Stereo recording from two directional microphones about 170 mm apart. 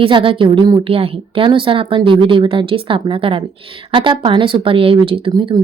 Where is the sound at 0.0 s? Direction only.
30° right (ahead or behind).